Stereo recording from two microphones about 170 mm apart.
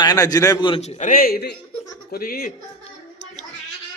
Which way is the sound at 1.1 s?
60° left (ahead or behind).